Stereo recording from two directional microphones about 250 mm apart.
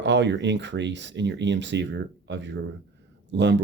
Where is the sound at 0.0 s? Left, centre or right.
Right.